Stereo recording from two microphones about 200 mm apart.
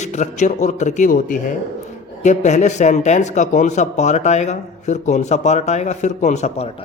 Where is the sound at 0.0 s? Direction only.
35° left (ahead or behind).